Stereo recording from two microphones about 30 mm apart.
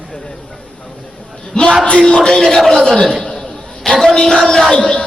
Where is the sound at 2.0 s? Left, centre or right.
Left.